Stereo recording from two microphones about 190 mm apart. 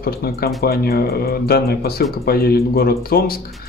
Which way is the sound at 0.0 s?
55° left (ahead or behind).